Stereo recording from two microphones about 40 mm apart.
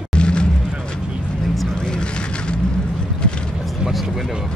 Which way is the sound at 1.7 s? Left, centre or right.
Left.